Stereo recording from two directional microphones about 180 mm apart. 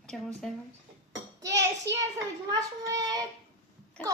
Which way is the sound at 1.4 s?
15° right (ahead or behind).